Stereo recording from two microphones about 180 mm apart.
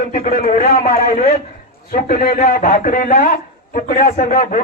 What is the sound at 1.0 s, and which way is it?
A man's voice, 50° left (ahead or behind).